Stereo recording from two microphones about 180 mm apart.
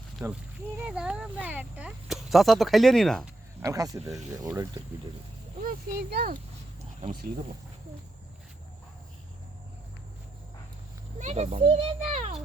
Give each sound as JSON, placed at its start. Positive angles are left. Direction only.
{"t": 0.2, "sound": "speech", "side_deg": -15}
{"t": 3.6, "sound": "speech", "side_deg": -20}
{"t": 5.6, "sound": "speech", "side_deg": -60}
{"t": 11.2, "sound": "a child's voice", "side_deg": -40}